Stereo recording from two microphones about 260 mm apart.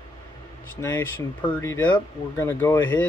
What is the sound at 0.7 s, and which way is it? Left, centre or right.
Speech, centre.